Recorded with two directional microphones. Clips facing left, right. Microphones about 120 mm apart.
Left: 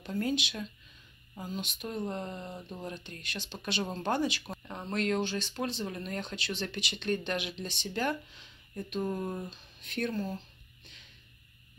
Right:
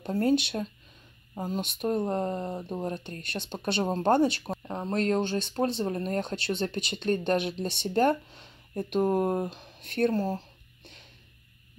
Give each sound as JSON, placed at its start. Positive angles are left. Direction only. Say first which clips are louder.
{"t": 0.1, "sound": "speech", "louder": "right 7 dB", "side_deg": -40}
{"t": 1.6, "sound": "speech", "louder": "right 9 dB", "side_deg": -50}
{"t": 4.2, "sound": "speech", "louder": "right 7 dB", "side_deg": -30}
{"t": 10.1, "sound": "speech", "louder": "right 7 dB", "side_deg": -35}